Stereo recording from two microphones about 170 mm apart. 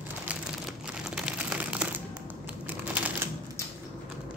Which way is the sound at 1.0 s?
5° right (ahead or behind).